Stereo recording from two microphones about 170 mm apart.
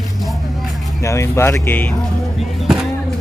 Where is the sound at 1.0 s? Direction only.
15° left (ahead or behind).